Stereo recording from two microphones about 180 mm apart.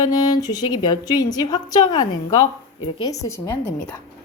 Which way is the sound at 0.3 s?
20° left (ahead or behind).